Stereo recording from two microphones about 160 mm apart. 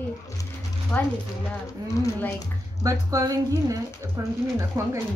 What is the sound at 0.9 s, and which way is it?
Speech, 10° left (ahead or behind).